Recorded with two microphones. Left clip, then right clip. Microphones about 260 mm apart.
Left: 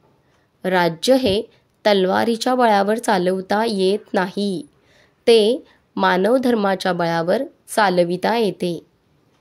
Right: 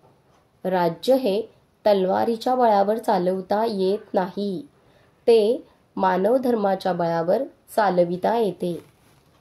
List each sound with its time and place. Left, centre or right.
0.6 s speech: left